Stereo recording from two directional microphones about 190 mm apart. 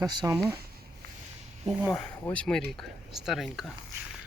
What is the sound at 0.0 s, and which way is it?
Speech, 20° right (ahead or behind).